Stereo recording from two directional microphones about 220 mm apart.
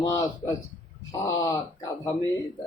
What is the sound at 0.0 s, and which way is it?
A man's voice, 15° left (ahead or behind).